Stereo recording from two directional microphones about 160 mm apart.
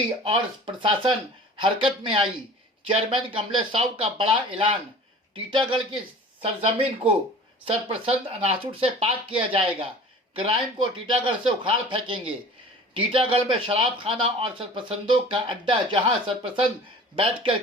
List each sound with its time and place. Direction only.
0.3 s a man's voice: 30° right (ahead or behind)